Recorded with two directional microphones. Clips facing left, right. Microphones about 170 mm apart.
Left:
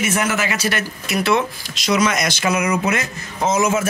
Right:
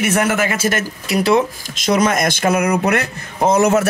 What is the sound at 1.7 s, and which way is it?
Speech, 50° right (ahead or behind).